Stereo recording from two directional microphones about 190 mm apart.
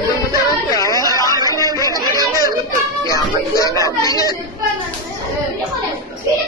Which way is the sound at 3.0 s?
20° left (ahead or behind).